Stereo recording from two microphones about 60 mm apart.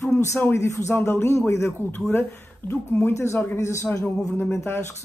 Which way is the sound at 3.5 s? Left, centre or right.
Left.